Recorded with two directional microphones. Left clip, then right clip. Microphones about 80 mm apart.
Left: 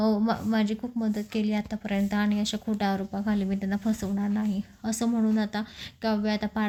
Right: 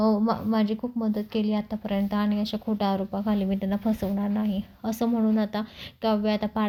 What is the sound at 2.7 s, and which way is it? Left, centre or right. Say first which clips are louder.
A woman's voice: right 4 dB; centre.